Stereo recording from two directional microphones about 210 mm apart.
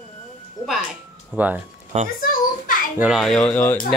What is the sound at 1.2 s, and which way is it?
Speech, 5° right (ahead or behind).